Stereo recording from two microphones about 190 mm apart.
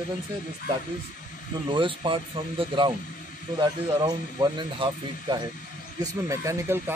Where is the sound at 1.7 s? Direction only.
25° right (ahead or behind).